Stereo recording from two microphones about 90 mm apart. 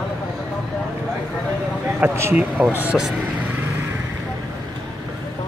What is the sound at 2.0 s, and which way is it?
Speech, 25° right (ahead or behind).